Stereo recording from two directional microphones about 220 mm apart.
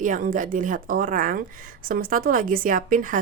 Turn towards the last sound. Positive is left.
turn(degrees=-40)  # may be behind; listen again after turning